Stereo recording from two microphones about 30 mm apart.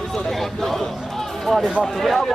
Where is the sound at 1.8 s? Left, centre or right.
Centre.